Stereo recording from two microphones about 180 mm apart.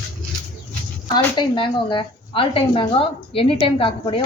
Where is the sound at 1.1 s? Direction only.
25° left (ahead or behind).